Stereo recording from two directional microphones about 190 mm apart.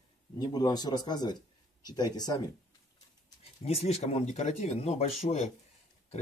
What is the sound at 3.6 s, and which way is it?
Speech, 35° left (ahead or behind).